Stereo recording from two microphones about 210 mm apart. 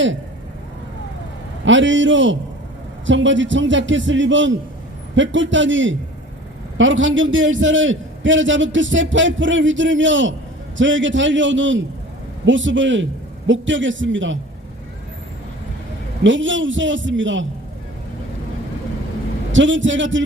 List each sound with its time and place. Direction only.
1.6 s a man's voice: 60° right (ahead or behind)
16.2 s a man's voice: 60° right (ahead or behind)
19.5 s a man's voice: 60° right (ahead or behind)